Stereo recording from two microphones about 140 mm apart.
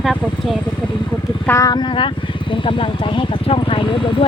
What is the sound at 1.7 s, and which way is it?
Speech, 35° left (ahead or behind).